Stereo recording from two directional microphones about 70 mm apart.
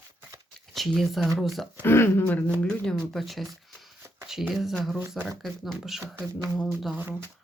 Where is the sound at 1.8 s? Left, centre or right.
Left.